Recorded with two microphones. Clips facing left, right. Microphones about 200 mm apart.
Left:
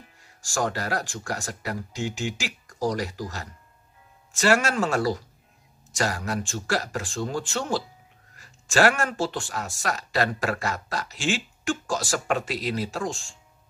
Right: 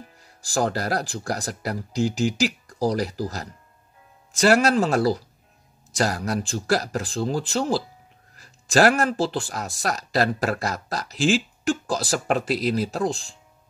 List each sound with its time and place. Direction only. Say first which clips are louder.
0.0 s speech: right 6 dB; 35° right (ahead or behind)